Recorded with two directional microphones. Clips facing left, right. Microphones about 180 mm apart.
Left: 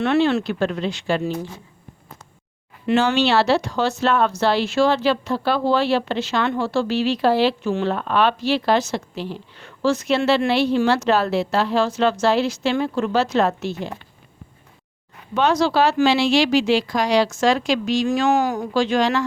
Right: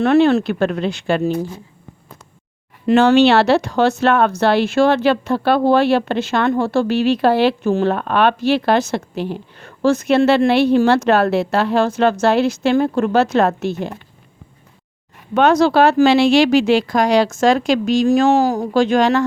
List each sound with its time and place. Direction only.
0.0 s speech: 45° right (ahead or behind)
2.9 s speech: 55° right (ahead or behind)
7.9 s a woman's voice: 55° right (ahead or behind)
15.4 s a woman's voice: 55° right (ahead or behind)
18.3 s speech: 35° right (ahead or behind)
18.7 s a woman's voice: 50° right (ahead or behind)